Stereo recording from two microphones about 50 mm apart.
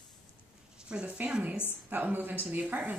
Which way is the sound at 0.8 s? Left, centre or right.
Right.